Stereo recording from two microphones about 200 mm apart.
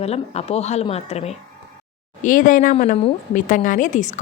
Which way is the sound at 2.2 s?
40° left (ahead or behind).